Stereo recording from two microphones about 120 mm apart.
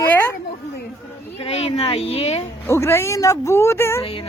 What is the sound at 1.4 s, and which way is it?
Speech, 55° left (ahead or behind).